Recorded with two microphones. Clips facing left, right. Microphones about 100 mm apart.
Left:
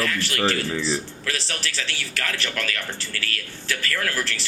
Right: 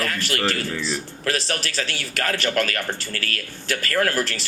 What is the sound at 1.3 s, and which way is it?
A man's voice, 50° right (ahead or behind).